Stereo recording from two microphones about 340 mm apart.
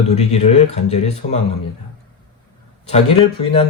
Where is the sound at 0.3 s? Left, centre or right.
Centre.